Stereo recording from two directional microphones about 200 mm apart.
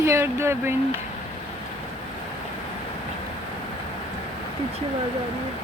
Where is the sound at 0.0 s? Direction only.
15° right (ahead or behind).